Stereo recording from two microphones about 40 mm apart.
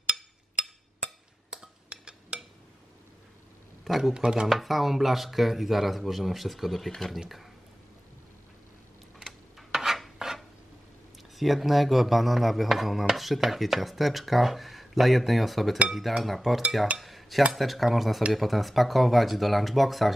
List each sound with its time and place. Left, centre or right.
0.0 s a sound: right
3.8 s a man's voice: centre
4.1 s speech: right
4.5 s speech: centre
9.2 s a sound: centre
11.3 s speech: centre
17.0 s cutlery: centre
17.5 s speech: centre